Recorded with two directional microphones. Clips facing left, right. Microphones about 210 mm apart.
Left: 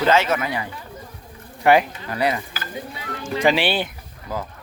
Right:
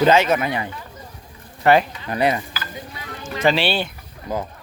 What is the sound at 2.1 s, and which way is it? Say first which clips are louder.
Speech: right 3 dB; 20° right (ahead or behind).